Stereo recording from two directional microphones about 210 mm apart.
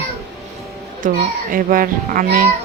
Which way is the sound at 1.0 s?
40° right (ahead or behind).